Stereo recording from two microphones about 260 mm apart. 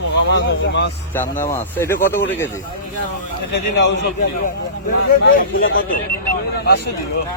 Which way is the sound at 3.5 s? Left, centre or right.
Left.